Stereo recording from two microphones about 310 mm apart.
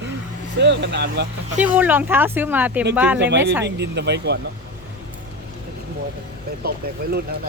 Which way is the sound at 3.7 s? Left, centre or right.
Right.